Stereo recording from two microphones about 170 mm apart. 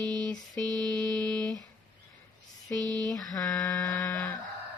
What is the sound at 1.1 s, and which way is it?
Speech, 5° left (ahead or behind).